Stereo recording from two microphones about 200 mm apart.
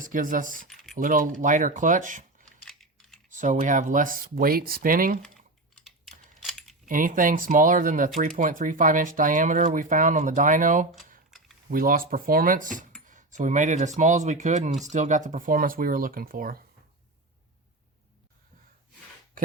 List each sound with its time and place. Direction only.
0.0 s speech: 40° right (ahead or behind)
2.6 s typing: centre (ahead or behind)
3.2 s speech: 40° right (ahead or behind)
6.4 s keys jangling: centre (ahead or behind)
6.8 s speech: 40° right (ahead or behind)
11.3 s a sound: centre (ahead or behind)
11.7 s speech: 45° right (ahead or behind)